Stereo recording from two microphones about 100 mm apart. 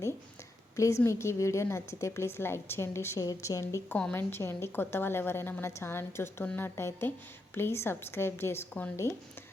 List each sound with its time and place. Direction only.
0.8 s a woman's voice: 30° left (ahead or behind)
3.8 s a woman's voice: 10° left (ahead or behind)
4.1 s a woman's voice: 20° left (ahead or behind)